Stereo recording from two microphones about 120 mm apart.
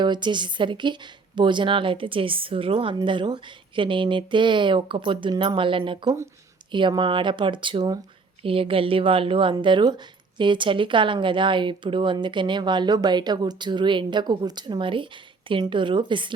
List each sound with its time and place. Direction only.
0.0 s a woman's voice: 40° right (ahead or behind)